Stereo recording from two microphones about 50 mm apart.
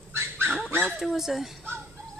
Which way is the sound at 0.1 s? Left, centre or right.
Right.